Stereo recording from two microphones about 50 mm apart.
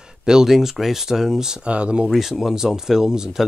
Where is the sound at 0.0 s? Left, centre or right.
Centre.